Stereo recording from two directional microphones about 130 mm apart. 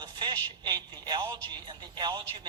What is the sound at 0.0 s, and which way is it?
A man's voice, 35° right (ahead or behind).